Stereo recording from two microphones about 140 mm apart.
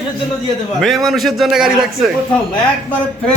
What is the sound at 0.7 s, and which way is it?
A man's voice, centre (ahead or behind).